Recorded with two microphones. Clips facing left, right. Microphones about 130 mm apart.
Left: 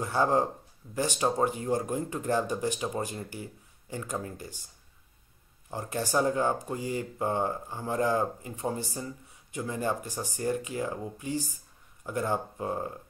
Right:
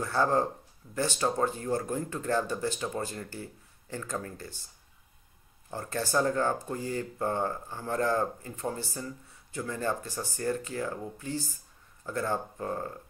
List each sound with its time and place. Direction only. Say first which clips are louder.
0.0 s speech: left 1 dB; 15° left (ahead or behind)
5.7 s speech: left 1 dB; 15° left (ahead or behind)